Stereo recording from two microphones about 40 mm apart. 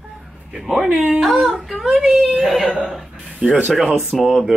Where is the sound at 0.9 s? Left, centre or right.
Centre.